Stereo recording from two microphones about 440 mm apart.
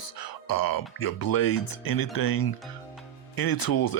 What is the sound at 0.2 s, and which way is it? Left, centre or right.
Speech, left.